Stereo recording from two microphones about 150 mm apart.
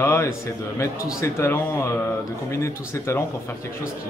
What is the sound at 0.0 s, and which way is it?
Speech, 20° left (ahead or behind).